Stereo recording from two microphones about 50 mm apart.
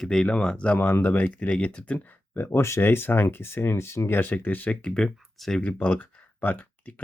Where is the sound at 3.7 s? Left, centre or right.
Left.